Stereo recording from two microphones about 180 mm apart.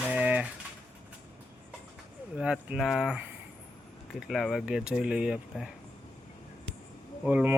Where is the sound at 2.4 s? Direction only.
5° right (ahead or behind).